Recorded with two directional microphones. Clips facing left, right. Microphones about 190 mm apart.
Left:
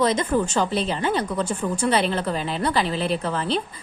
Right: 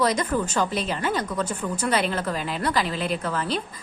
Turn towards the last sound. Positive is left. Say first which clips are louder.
# left 2 dB
turn(degrees=30)  # may be behind; listen again after turning